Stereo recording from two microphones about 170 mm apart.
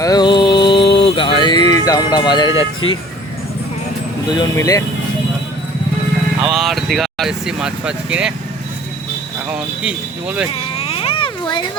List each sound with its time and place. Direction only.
0.0 s music: 25° left (ahead or behind)
4.3 s speech: 20° left (ahead or behind)
6.5 s speech: centre (ahead or behind)
9.5 s speech: 5° right (ahead or behind)
10.5 s baby cry: 35° left (ahead or behind)